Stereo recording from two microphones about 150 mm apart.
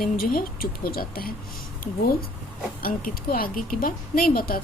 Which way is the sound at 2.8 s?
75° left (ahead or behind).